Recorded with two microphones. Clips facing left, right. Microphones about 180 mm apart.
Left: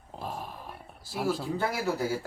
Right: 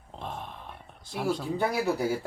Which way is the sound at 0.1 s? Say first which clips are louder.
Left 1 dB; 5° left (ahead or behind).